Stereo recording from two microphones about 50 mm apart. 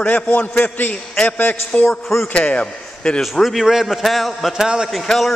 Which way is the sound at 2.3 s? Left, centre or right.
Left.